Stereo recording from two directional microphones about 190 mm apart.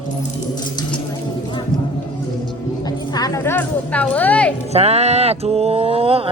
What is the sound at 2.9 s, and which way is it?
Music, 20° left (ahead or behind).